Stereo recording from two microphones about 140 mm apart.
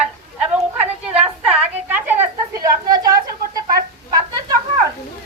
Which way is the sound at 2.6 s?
25° right (ahead or behind).